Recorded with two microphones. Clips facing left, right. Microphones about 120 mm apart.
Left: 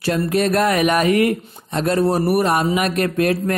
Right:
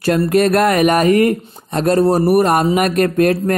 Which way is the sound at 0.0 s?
55° right (ahead or behind).